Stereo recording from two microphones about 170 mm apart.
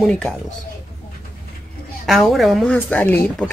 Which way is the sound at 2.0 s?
Centre (ahead or behind).